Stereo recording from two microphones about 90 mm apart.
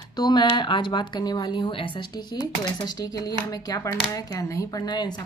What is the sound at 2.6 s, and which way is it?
A woman's voice, 45° left (ahead or behind).